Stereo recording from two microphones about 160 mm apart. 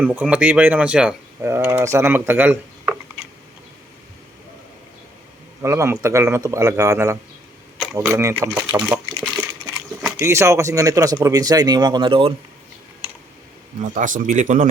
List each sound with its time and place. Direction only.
0.0 s speech: 10° right (ahead or behind)
5.6 s speech: 20° right (ahead or behind)
8.8 s a sound: 5° right (ahead or behind)
10.1 s speech: 15° right (ahead or behind)
13.8 s speech: 55° right (ahead or behind)